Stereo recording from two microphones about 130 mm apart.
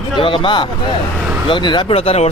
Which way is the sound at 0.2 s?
40° left (ahead or behind).